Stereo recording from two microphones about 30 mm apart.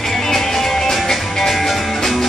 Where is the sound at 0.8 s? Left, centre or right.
Centre.